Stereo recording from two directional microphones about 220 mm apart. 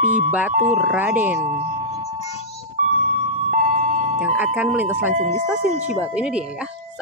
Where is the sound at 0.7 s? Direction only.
5° right (ahead or behind).